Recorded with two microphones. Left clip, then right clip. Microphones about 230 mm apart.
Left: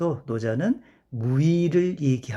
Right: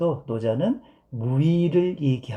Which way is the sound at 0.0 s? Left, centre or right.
Left.